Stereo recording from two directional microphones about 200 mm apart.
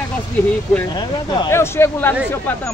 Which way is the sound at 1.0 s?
15° left (ahead or behind).